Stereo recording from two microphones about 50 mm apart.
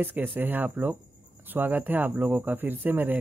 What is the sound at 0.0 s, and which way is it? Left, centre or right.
Speech, right.